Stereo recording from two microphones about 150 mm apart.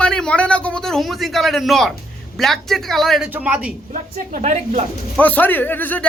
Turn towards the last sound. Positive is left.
turn(degrees=10)  # may be behind; listen again after turning